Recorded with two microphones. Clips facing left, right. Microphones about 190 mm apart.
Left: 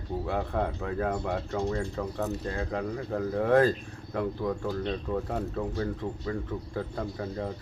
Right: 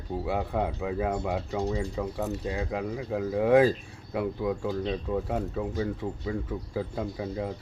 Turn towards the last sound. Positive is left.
turn(degrees=-5)  # may be behind; listen again after turning